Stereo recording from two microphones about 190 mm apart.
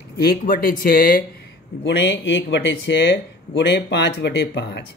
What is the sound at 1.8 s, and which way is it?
Speech, 70° left (ahead or behind).